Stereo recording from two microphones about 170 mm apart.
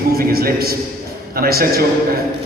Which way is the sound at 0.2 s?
60° right (ahead or behind).